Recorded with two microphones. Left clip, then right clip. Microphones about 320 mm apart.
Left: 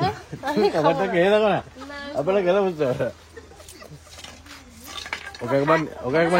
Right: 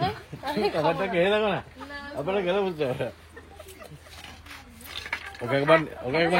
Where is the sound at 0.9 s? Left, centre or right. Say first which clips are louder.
Left 3 dB; centre.